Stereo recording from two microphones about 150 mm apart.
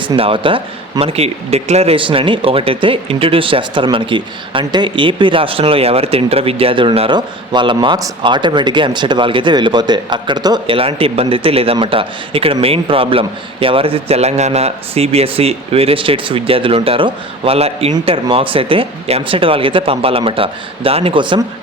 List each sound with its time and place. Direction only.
0.0 s speech: 35° right (ahead or behind)